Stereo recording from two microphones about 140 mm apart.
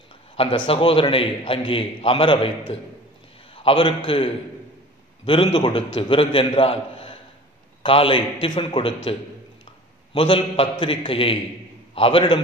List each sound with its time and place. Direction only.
0.4 s a man's voice: 40° left (ahead or behind)
3.5 s a man's voice: 40° left (ahead or behind)
10.1 s a man's voice: 40° left (ahead or behind)